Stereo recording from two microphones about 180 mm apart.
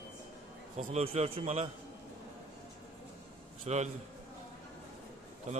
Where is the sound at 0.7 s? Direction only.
40° right (ahead or behind).